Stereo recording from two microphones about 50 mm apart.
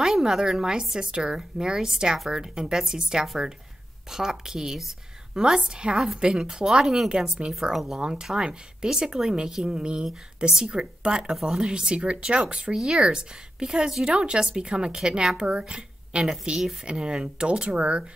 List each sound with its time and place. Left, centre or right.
0.0 s a woman's voice: centre